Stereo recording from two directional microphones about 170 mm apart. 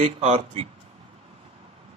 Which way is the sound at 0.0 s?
45° right (ahead or behind).